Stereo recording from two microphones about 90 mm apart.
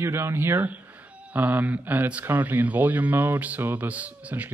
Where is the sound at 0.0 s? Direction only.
30° right (ahead or behind).